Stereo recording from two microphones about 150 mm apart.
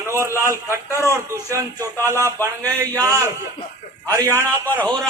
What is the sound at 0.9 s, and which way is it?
Speech, 20° left (ahead or behind).